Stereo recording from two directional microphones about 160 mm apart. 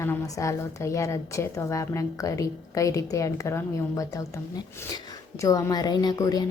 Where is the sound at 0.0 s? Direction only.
15° left (ahead or behind).